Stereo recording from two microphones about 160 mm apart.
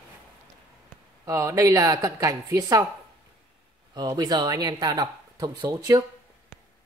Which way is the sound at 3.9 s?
25° right (ahead or behind).